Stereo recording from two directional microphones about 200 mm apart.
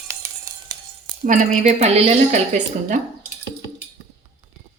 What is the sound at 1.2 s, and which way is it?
A woman's voice, 40° right (ahead or behind).